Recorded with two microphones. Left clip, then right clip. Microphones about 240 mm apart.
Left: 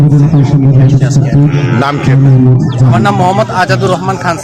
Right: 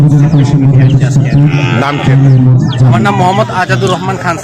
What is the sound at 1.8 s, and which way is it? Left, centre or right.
Speech, centre.